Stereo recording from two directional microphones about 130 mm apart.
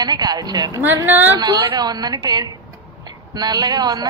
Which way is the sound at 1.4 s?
30° right (ahead or behind).